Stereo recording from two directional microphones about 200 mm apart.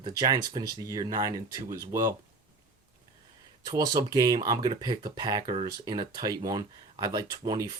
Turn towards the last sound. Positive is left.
turn(degrees=-20)  # may be behind; listen again after turning